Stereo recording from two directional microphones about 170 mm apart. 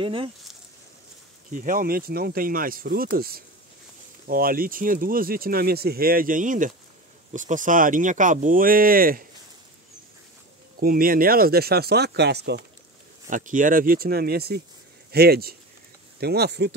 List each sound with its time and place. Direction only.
0.0 s speech: 30° right (ahead or behind)
1.5 s speech: 55° right (ahead or behind)
10.8 s speech: 60° right (ahead or behind); by 12.6 s 75° right (ahead or behind)
13.3 s speech: 50° right (ahead or behind); by 16.7 s 70° right (ahead or behind)